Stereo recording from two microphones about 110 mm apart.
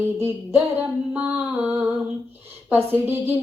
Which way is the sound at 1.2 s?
15° right (ahead or behind).